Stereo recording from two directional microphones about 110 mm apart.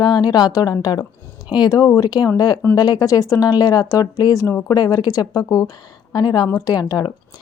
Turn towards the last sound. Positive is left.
turn(degrees=35)  # may be behind; listen again after turning